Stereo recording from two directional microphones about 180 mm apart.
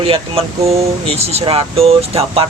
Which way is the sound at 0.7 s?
35° right (ahead or behind).